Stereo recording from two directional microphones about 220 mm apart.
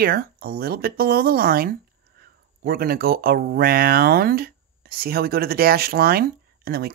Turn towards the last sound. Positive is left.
turn(degrees=-45)  # may be behind; listen again after turning